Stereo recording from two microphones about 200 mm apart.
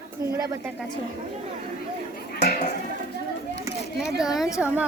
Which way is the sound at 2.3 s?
40° left (ahead or behind).